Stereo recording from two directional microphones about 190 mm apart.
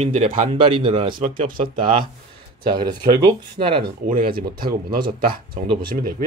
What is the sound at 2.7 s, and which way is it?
Speech, 25° right (ahead or behind).